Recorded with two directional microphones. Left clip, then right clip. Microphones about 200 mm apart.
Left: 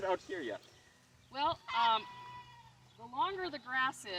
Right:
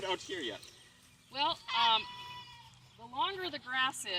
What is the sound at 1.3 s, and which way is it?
Speech, centre (ahead or behind).